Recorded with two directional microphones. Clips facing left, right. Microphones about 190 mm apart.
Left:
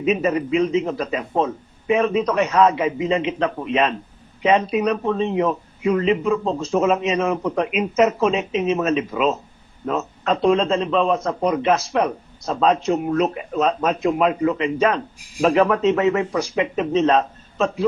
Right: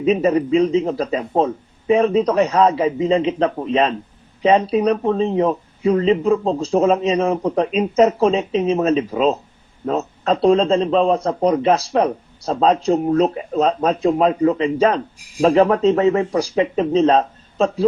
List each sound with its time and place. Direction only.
0.0 s a man's voice: 30° right (ahead or behind)